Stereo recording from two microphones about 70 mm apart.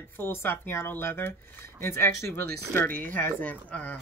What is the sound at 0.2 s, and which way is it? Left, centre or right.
Speech, left.